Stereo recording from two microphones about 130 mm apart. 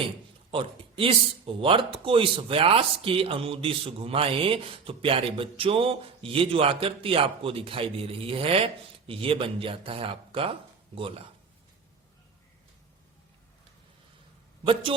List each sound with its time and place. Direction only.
0.5 s speech: 45° right (ahead or behind)
14.6 s a man's voice: 45° right (ahead or behind)